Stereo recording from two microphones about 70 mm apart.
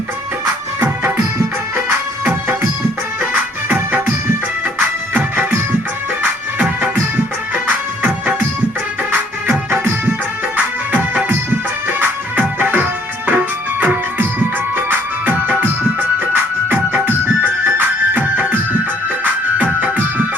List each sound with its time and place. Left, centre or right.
3.2 s music: right
9.5 s music: right
10.9 s music: right